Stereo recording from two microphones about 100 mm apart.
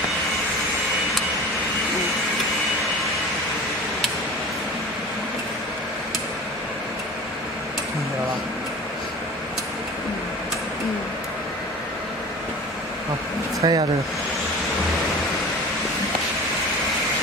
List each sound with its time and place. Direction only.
13.6 s speech: 40° right (ahead or behind)